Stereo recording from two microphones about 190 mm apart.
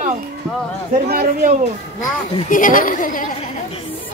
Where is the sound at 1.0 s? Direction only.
50° right (ahead or behind).